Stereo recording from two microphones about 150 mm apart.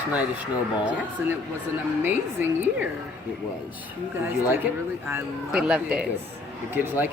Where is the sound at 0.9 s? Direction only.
10° right (ahead or behind).